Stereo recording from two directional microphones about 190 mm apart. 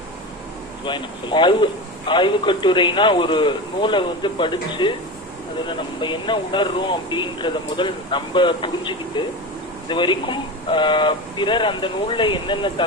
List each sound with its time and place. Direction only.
0.8 s a man's voice: 25° left (ahead or behind)